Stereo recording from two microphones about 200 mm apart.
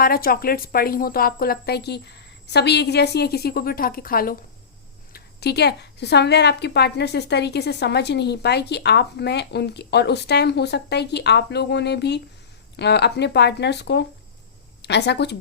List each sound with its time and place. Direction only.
0.0 s a woman's voice: 50° left (ahead or behind)